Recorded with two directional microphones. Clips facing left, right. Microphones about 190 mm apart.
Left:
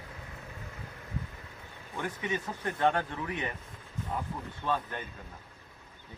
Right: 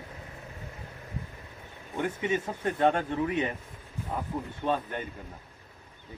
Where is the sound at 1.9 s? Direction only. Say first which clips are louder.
Right 5 dB; 25° right (ahead or behind).